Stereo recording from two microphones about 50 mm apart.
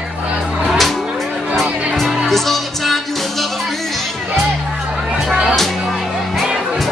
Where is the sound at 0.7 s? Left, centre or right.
Centre.